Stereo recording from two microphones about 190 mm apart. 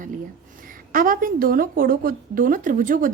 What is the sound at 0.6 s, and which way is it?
A woman's voice, 45° right (ahead or behind).